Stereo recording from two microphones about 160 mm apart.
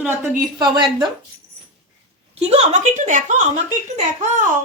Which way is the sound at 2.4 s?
40° right (ahead or behind).